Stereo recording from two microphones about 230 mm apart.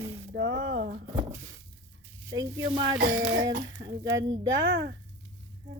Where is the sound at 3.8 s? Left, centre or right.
Right.